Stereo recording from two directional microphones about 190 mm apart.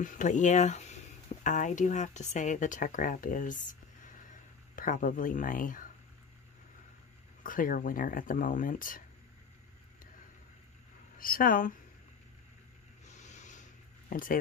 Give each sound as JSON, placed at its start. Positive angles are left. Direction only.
{"t": 0.0, "sound": "speech", "side_deg": 40}
{"t": 7.4, "sound": "speech", "side_deg": 45}
{"t": 11.1, "sound": "speech", "side_deg": 50}
{"t": 13.0, "sound": "a sound", "side_deg": 40}